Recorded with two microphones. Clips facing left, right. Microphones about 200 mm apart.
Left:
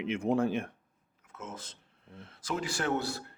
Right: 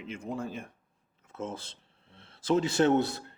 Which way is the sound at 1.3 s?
30° right (ahead or behind).